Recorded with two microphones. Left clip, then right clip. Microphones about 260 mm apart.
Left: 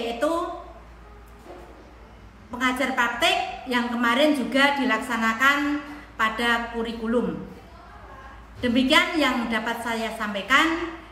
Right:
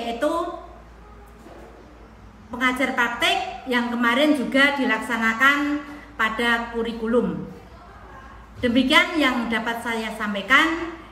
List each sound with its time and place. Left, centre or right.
0.0 s a woman's voice: centre
2.5 s a woman's voice: centre
8.5 s a woman's voice: centre